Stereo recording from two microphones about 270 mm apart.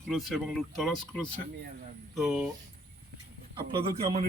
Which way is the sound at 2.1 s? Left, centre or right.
Centre.